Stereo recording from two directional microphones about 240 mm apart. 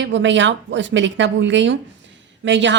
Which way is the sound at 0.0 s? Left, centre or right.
Right.